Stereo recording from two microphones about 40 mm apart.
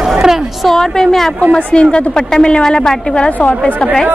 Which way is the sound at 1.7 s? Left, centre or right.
Left.